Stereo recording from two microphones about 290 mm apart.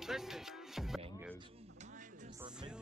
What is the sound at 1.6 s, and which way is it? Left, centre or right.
Music, right.